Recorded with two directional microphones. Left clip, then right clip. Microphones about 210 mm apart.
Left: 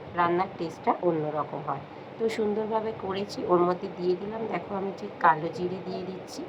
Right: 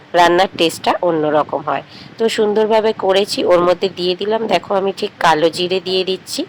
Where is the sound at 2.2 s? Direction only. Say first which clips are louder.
Right 14 dB; 10° right (ahead or behind).